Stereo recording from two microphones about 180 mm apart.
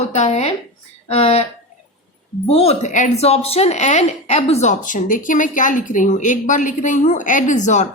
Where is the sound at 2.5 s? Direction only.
35° left (ahead or behind).